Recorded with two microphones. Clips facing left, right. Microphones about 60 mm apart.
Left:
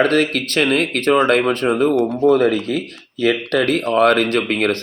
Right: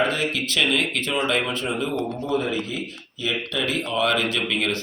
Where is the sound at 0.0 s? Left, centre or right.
Left.